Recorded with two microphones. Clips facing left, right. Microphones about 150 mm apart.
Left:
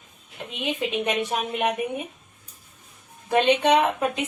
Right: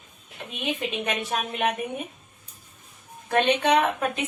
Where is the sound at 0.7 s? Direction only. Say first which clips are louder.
Left 3 dB; 15° left (ahead or behind).